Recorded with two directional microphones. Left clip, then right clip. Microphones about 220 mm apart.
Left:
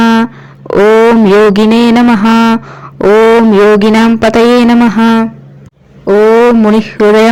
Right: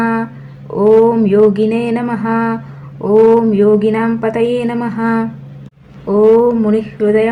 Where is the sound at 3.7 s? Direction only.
45° left (ahead or behind).